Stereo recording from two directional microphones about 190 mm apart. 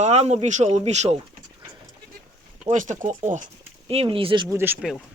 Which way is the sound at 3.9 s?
30° right (ahead or behind).